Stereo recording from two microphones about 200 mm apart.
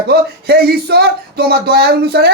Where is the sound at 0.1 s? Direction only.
50° right (ahead or behind).